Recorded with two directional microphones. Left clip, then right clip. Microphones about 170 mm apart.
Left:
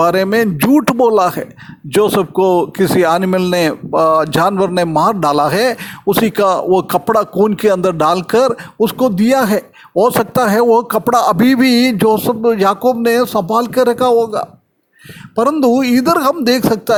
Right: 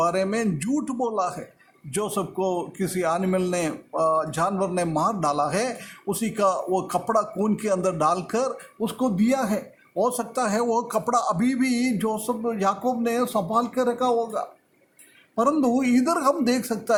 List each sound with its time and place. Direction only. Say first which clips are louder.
0.0 s speech: left 11 dB; 45° left (ahead or behind)